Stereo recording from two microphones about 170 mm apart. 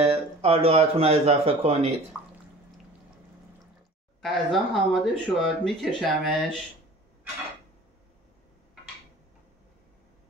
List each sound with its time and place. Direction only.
0.0 s speech: 35° right (ahead or behind)
4.2 s speech: centre (ahead or behind)